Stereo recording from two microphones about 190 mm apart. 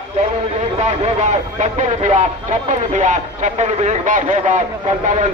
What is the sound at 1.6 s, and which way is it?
Speech, 40° right (ahead or behind).